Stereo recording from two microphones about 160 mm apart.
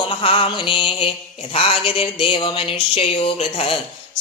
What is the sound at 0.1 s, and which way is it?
A man's voice, 35° left (ahead or behind).